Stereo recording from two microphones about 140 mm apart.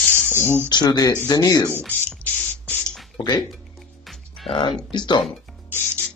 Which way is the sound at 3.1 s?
30° left (ahead or behind).